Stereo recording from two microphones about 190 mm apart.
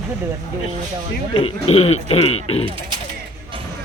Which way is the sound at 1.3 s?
30° left (ahead or behind).